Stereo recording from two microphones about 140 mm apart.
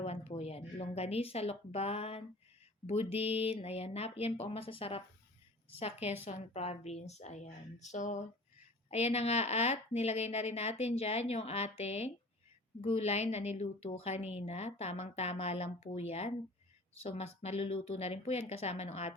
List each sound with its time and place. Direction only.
0.0 s a woman's voice: 45° left (ahead or behind)
8.9 s a woman's voice: 50° left (ahead or behind)